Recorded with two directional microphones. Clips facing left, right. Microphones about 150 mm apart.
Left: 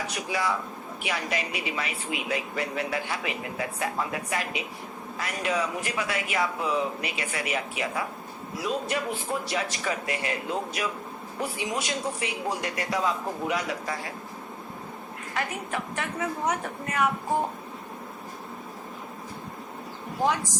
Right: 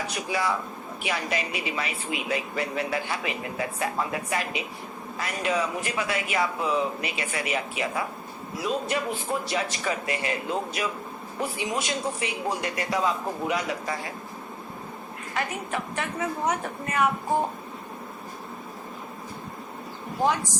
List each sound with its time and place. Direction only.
0.1 s a man's voice: 30° right (ahead or behind)
15.4 s a man's voice: 25° right (ahead or behind)